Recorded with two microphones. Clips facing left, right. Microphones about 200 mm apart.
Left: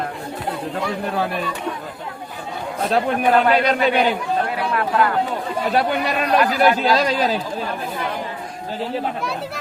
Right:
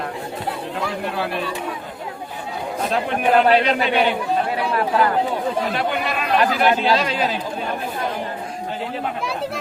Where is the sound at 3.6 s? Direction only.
40° left (ahead or behind).